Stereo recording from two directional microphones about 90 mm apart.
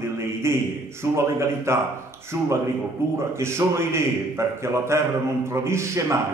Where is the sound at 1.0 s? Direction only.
30° right (ahead or behind).